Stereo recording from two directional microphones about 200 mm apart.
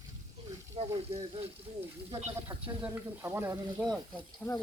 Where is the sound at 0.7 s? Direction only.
30° right (ahead or behind).